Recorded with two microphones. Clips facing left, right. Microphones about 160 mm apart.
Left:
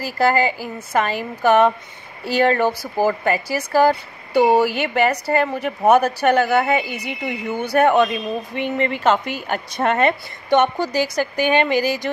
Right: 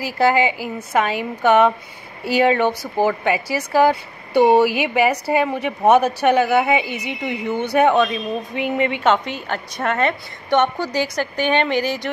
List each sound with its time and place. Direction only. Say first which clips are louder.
0.0 s a woman's voice: right 1 dB; centre (ahead or behind)
8.5 s a woman's voice: right 2 dB; 5° right (ahead or behind)